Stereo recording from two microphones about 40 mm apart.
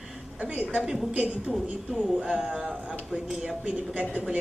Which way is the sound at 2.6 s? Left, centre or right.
Centre.